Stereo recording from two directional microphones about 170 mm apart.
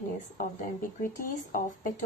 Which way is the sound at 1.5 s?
50° left (ahead or behind).